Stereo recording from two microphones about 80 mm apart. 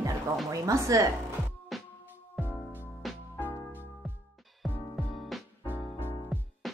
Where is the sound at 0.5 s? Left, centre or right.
Right.